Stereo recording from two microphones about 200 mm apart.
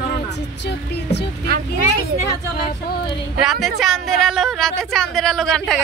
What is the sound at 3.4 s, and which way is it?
A woman's voice, centre (ahead or behind).